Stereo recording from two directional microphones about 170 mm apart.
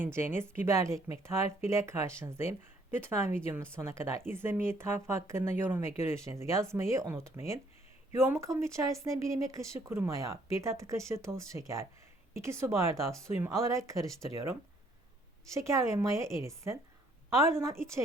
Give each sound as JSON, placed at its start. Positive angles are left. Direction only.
{"t": 0.0, "sound": "speech", "side_deg": -15}
{"t": 15.4, "sound": "speech", "side_deg": -15}